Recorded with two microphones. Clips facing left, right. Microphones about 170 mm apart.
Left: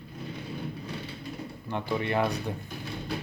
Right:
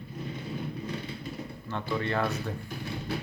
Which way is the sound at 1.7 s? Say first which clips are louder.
Left 2 dB; 15° left (ahead or behind).